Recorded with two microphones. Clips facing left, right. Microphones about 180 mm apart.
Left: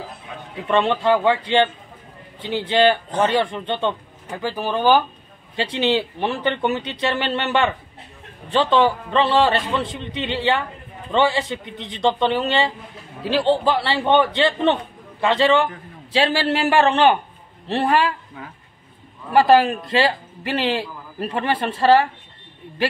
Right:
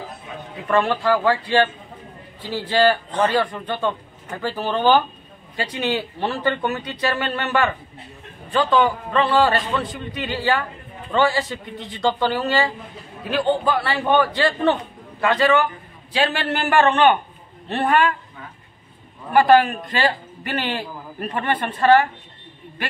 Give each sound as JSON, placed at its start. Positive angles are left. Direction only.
{"t": 0.7, "sound": "a man's voice", "side_deg": 25}
{"t": 4.3, "sound": "speech", "side_deg": 15}
{"t": 5.6, "sound": "a man's voice", "side_deg": 25}
{"t": 19.3, "sound": "a man's voice", "side_deg": 30}